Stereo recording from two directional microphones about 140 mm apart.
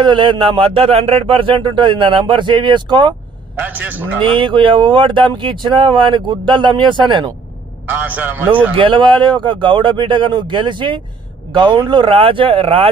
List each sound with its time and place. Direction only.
0.0 s speech: 35° right (ahead or behind)
3.6 s a man's voice: 10° right (ahead or behind)
4.4 s speech: 35° right (ahead or behind)
7.9 s a man's voice: 10° right (ahead or behind)
8.7 s speech: 35° right (ahead or behind)